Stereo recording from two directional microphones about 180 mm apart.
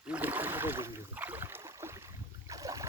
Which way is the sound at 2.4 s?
20° right (ahead or behind).